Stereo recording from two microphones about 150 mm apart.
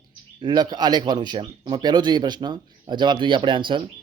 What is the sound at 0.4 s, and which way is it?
Speech, 30° right (ahead or behind).